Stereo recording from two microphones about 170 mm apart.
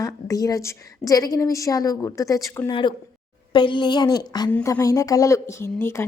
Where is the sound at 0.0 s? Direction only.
20° left (ahead or behind).